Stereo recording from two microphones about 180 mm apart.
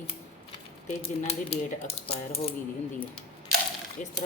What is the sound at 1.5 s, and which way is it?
Speech, 35° left (ahead or behind).